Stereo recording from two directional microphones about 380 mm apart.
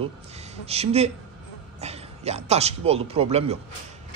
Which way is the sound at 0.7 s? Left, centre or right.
Centre.